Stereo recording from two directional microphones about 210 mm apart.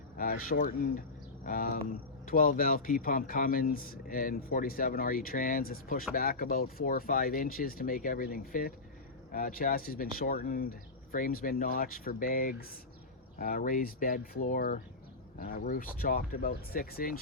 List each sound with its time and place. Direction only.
0.2 s speech: 40° left (ahead or behind)